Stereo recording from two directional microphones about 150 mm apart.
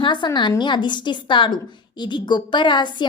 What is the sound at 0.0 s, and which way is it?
A woman's voice, 30° left (ahead or behind).